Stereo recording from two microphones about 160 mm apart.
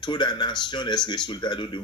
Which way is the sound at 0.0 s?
30° left (ahead or behind).